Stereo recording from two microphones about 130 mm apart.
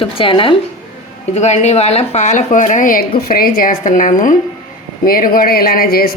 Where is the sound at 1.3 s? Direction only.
60° left (ahead or behind).